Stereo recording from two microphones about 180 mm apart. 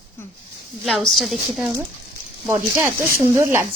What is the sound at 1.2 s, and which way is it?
Speech, centre (ahead or behind).